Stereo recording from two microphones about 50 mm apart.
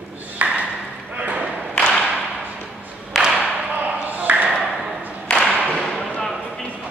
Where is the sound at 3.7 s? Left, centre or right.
Right.